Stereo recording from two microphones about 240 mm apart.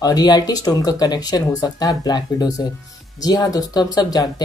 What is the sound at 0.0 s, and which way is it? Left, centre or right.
Speech, centre.